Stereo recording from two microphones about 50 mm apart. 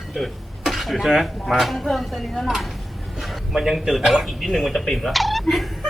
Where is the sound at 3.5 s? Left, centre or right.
Centre.